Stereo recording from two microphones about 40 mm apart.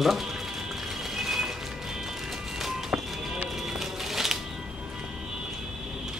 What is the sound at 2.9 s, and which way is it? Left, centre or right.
Run, centre.